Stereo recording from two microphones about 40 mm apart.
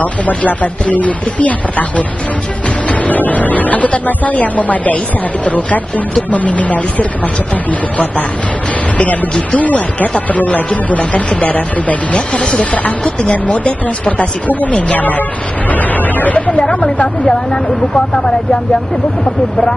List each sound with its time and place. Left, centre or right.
0.0 s speech: left
8.9 s speech: left
17.9 s speech: left